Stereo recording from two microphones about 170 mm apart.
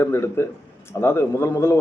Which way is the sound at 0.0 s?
15° left (ahead or behind).